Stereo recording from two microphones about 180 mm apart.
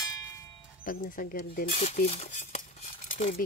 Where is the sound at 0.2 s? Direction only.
15° left (ahead or behind).